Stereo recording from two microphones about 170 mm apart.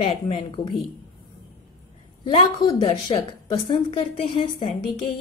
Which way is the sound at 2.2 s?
30° left (ahead or behind).